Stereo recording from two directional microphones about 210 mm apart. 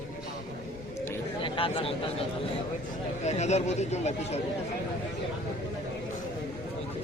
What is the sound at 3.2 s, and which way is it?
Speech, 30° left (ahead or behind).